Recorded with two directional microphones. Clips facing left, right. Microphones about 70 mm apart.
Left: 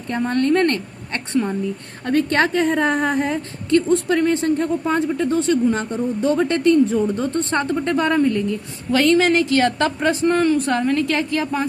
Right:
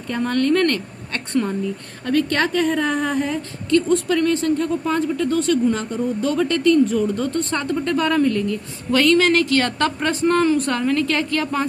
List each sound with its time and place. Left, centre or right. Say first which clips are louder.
0.1 s a woman's voice: left 1 dB; left; by 10.4 s centre
10.4 s a woman's voice: even; centre
11.1 s a woman's voice: even; centre